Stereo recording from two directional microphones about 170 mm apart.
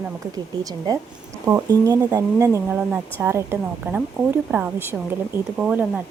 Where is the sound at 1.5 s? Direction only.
20° right (ahead or behind).